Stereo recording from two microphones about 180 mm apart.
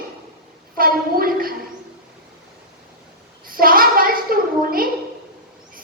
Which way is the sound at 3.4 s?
55° right (ahead or behind).